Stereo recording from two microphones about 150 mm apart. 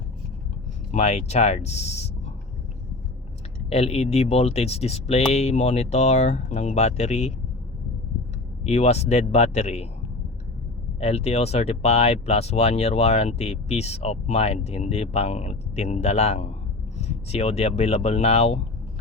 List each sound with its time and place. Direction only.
0.9 s speech: 50° left (ahead or behind)
3.7 s speech: 40° left (ahead or behind)
8.6 s speech: 45° left (ahead or behind)
11.0 s speech: 45° left (ahead or behind)